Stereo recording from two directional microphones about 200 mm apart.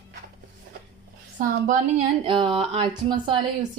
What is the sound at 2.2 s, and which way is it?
Speech, 25° right (ahead or behind).